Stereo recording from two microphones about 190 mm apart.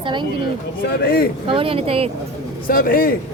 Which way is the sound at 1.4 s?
30° right (ahead or behind).